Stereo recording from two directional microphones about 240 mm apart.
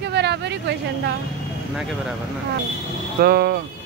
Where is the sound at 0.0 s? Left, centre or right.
Right.